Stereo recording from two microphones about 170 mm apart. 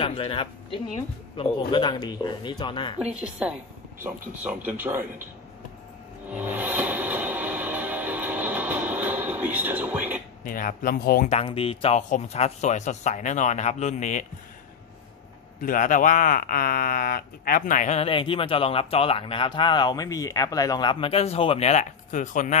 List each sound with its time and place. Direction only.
0.0 s a man's voice: 30° left (ahead or behind)
3.0 s speech: 5° right (ahead or behind)
6.3 s music: 10° right (ahead or behind)
10.4 s speech: 55° left (ahead or behind)
11.2 s speech: 35° left (ahead or behind)
15.6 s speech: 50° left (ahead or behind)